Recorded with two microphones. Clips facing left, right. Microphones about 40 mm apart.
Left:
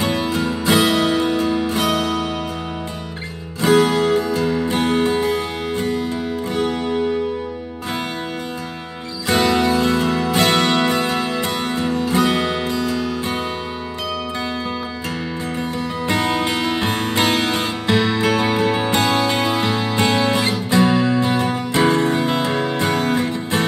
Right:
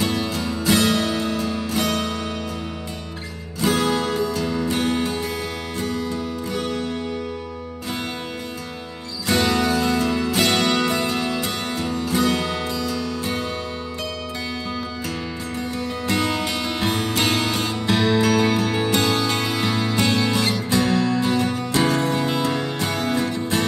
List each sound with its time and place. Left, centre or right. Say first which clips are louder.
0.0 s music: left 4 dB; left
3.7 s music: left 8 dB; centre
9.3 s music: left 3 dB; centre
16.2 s music: left 5 dB; centre